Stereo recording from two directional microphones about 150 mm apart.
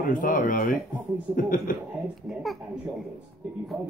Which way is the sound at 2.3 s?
Centre (ahead or behind).